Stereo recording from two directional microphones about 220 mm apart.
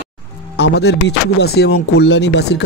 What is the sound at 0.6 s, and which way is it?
Speech, 50° left (ahead or behind).